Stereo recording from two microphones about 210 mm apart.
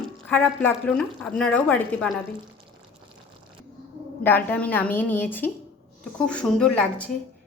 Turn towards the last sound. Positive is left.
turn(degrees=5)  # may be behind; listen again after turning